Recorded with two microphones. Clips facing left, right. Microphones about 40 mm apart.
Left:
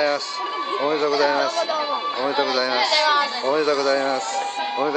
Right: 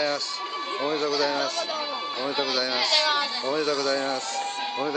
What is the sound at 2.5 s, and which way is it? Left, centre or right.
Speech, centre.